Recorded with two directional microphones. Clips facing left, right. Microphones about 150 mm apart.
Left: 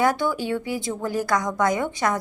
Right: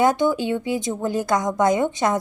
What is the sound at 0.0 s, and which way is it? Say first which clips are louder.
A woman's voice: right 3 dB; 20° right (ahead or behind).